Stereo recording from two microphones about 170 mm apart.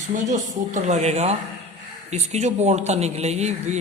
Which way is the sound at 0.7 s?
40° right (ahead or behind).